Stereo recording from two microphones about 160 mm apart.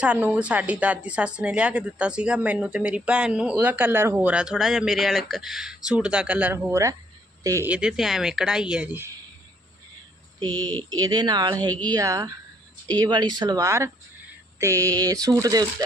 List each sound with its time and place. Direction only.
0.0 s a woman's voice: 10° right (ahead or behind)
7.7 s speech: 5° right (ahead or behind)
10.8 s speech: 25° right (ahead or behind)